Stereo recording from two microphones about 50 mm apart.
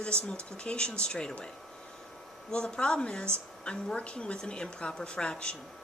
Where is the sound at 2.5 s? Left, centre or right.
Centre.